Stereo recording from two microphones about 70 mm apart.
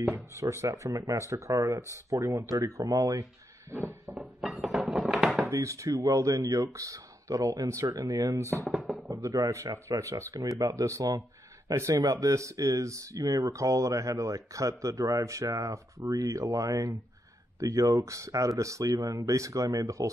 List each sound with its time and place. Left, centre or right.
0.0 s speech: right
3.7 s a sound: right
4.4 s dishes: centre
5.0 s a sound: centre
5.5 s speech: right
8.4 s speech: right
8.7 s a sound: centre
9.1 s speech: right
12.0 s speech: right